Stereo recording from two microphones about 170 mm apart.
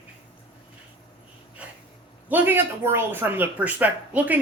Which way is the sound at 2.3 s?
10° right (ahead or behind).